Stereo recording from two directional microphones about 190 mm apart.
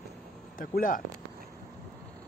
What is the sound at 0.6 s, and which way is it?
Speech, 45° left (ahead or behind).